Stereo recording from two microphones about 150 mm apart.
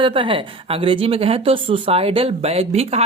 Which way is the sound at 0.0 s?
35° right (ahead or behind).